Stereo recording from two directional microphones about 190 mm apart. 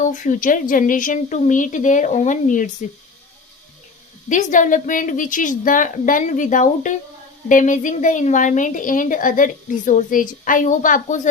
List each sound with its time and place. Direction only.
0.0 s a woman's voice: 40° left (ahead or behind)
4.3 s a woman's voice: 40° left (ahead or behind)